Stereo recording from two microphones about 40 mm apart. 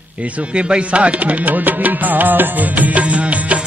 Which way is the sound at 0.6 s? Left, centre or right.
Right.